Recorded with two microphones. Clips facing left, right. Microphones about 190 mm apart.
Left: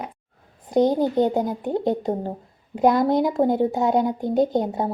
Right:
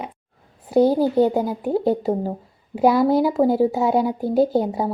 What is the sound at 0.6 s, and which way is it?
A woman's voice, 10° right (ahead or behind).